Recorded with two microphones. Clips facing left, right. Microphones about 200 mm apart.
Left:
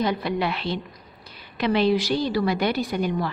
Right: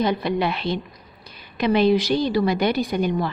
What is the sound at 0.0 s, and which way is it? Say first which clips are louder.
A woman's voice: right 3 dB; 20° right (ahead or behind).